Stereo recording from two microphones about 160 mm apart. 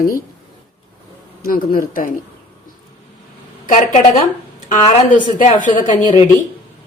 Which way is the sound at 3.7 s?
45° left (ahead or behind).